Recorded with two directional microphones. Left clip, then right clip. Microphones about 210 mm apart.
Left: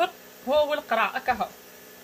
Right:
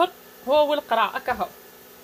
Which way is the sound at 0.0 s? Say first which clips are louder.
Right 3 dB; 30° right (ahead or behind).